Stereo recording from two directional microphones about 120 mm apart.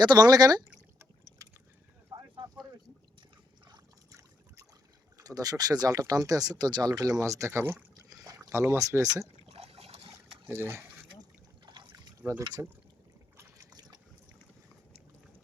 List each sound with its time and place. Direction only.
0.0 s speech: 35° right (ahead or behind)
2.1 s a sound: 40° right (ahead or behind)
3.7 s water: 25° right (ahead or behind)
5.1 s speech: 30° right (ahead or behind)
9.5 s water: 55° right (ahead or behind)
10.5 s speech: 20° right (ahead or behind)
11.6 s trickle: 40° right (ahead or behind)
12.4 s speech: 30° right (ahead or behind)
13.3 s boat: 20° right (ahead or behind)